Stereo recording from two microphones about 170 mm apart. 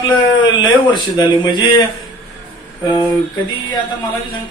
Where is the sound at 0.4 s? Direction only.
25° left (ahead or behind).